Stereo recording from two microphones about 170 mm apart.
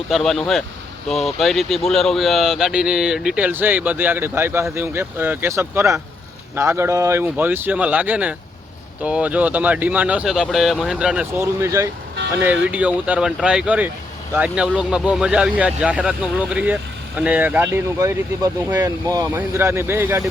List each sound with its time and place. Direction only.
0.1 s speech: centre (ahead or behind)
11.3 s speech: 15° right (ahead or behind)